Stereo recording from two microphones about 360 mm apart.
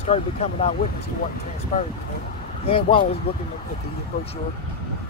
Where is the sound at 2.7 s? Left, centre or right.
Centre.